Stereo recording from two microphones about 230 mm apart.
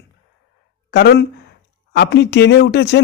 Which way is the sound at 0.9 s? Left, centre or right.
Left.